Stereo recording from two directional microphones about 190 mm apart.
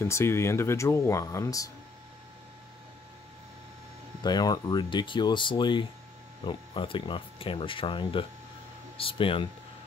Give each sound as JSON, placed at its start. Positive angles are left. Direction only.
{"t": 0.0, "sound": "speech", "side_deg": 15}
{"t": 4.2, "sound": "speech", "side_deg": 20}